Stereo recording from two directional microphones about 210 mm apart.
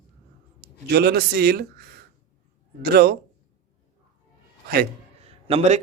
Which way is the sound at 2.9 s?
50° right (ahead or behind).